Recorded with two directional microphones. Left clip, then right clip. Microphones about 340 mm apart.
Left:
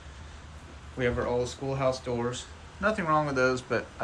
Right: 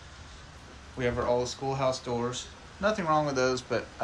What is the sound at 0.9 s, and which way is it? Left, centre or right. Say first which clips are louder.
Speech: even; centre.